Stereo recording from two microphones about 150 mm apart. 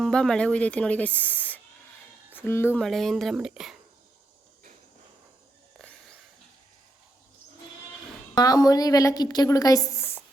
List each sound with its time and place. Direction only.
0.0 s speech: 5° left (ahead or behind)
2.8 s speech: centre (ahead or behind)
5.8 s a sound: 5° left (ahead or behind)
8.4 s a woman's voice: 25° left (ahead or behind)